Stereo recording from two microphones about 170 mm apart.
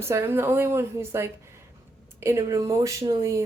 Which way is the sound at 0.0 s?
15° right (ahead or behind).